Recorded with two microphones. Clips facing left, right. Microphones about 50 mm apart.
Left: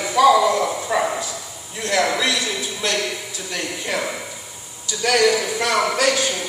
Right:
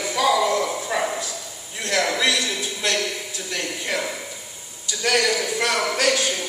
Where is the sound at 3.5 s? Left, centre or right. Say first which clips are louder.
Left 1 dB; centre.